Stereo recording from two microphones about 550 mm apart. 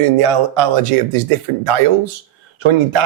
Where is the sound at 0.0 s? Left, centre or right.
Right.